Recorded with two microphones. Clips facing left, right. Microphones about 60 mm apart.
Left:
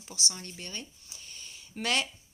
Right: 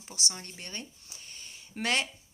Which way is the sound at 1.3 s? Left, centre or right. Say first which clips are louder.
Even; right.